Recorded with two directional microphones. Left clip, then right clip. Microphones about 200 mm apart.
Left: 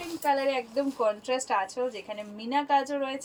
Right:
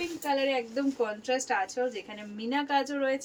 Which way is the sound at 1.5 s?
15° right (ahead or behind).